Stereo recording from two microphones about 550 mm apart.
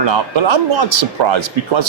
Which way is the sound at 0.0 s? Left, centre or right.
Right.